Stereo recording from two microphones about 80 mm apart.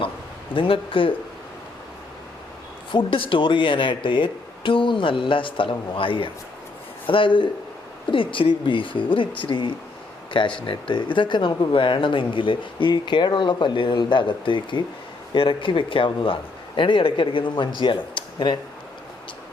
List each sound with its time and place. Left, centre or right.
0.5 s speech: left
2.9 s speech: left